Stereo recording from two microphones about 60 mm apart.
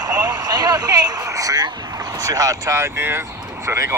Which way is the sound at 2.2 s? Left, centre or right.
Right.